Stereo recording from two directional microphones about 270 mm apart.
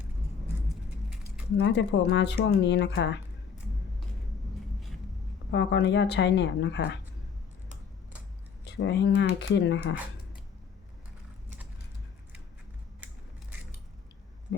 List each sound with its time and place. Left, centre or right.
1.5 s speech: left
5.5 s speech: left
8.6 s speech: left